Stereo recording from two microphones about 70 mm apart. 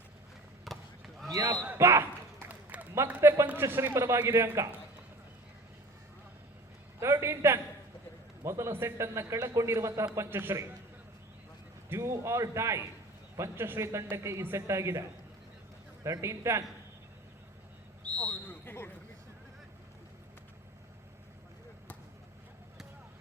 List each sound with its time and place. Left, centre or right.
0.6 s basketball bounce: centre
1.3 s speech: right
1.8 s basketball bounce: right
2.5 s a sound: right
3.2 s a man's voice: right
7.0 s a man's voice: right
10.2 s a man's voice: right
11.9 s a man's voice: right
16.2 s a man's voice: right
18.2 s a sound: centre
18.6 s basketball bounce: left